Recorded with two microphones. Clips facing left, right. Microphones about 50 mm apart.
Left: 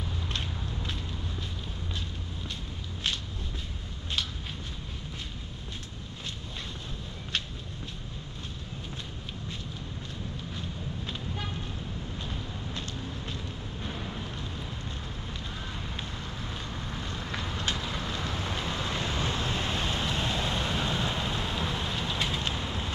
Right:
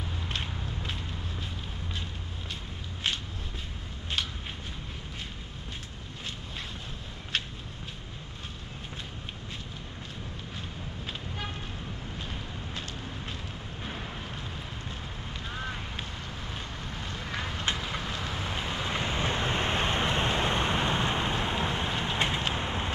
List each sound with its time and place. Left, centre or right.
12.7 s vehicle: centre
13.8 s vehicle: right
15.5 s a sound: right
16.7 s boat: centre
17.4 s vehicle: right
18.1 s waves: centre; by 22.4 s right
22.4 s vehicle: right